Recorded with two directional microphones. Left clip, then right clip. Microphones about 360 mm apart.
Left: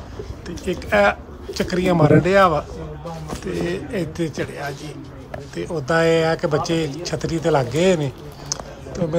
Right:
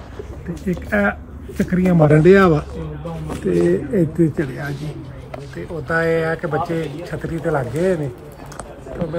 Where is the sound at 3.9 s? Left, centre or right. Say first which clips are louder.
Right 7 dB; centre.